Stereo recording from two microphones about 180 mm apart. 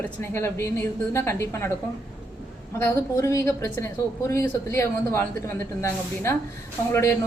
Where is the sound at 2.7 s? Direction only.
15° left (ahead or behind).